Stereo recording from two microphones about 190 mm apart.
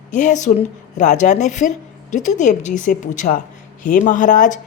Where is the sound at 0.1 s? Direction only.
40° left (ahead or behind).